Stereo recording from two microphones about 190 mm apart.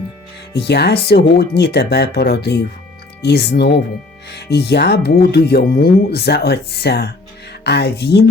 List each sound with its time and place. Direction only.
0.5 s speech: 60° left (ahead or behind)